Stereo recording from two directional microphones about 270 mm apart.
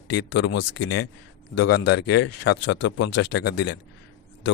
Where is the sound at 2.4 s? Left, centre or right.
Left.